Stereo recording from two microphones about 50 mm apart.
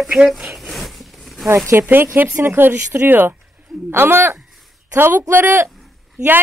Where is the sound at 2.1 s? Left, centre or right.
Right.